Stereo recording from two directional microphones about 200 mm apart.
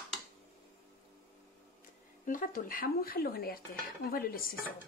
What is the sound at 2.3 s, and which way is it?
Speech, 45° left (ahead or behind).